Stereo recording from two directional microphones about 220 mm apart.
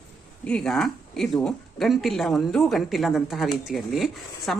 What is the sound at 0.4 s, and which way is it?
Speech, 5° left (ahead or behind).